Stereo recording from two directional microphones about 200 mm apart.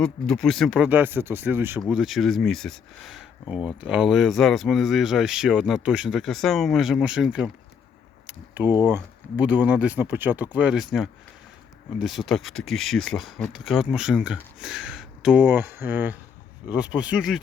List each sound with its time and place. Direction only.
0.0 s speech: 5° left (ahead or behind)
8.3 s a sound: 10° right (ahead or behind)
8.8 s speech: 10° right (ahead or behind)
11.9 s speech: centre (ahead or behind)